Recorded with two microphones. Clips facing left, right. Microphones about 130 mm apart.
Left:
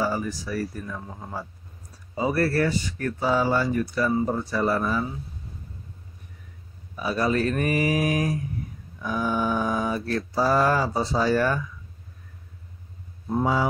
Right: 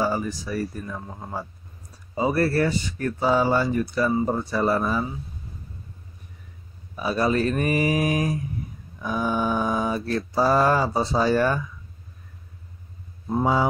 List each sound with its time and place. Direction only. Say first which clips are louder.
0.0 s mantra: right 2 dB; 25° right (ahead or behind)
1.0 s a man's voice: right 2 dB; 10° right (ahead or behind)
2.1 s mantra: right 1 dB; 25° right (ahead or behind)
7.0 s mantra: right 1 dB; 25° right (ahead or behind)